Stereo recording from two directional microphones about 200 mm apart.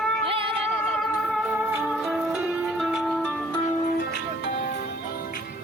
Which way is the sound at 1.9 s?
Centre (ahead or behind).